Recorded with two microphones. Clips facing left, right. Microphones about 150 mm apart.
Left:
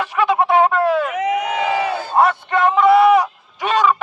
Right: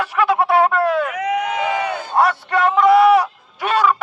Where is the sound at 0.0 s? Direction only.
5° right (ahead or behind).